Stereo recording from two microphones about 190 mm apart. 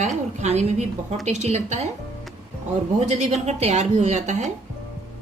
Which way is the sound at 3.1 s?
35° right (ahead or behind).